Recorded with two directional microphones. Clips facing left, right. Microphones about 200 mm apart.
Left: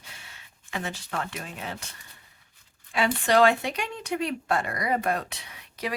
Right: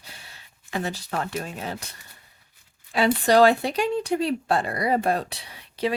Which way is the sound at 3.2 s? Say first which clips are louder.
Right 3 dB; 35° right (ahead or behind).